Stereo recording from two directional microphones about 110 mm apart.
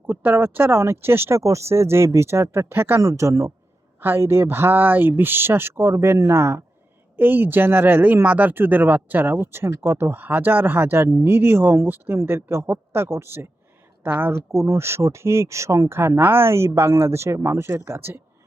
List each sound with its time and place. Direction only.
0.1 s speech: 15° right (ahead or behind)